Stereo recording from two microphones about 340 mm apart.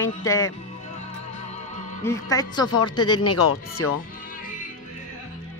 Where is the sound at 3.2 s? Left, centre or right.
Left.